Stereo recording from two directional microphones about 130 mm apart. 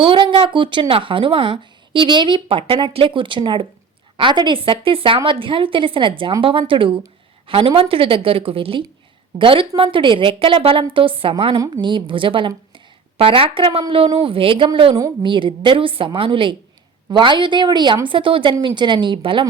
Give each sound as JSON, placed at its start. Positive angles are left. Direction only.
{"t": 0.0, "sound": "a woman's voice", "side_deg": -40}
{"t": 11.5, "sound": "a woman's voice", "side_deg": -30}